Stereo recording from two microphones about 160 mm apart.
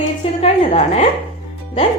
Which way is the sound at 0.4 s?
40° left (ahead or behind).